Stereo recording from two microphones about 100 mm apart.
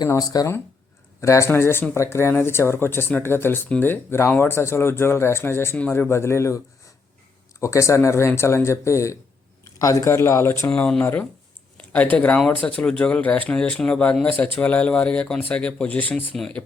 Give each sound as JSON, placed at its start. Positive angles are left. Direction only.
{"t": 0.0, "sound": "speech", "side_deg": 40}
{"t": 7.6, "sound": "speech", "side_deg": 30}
{"t": 10.7, "sound": "speech", "side_deg": 5}
{"t": 11.0, "sound": "speech", "side_deg": 20}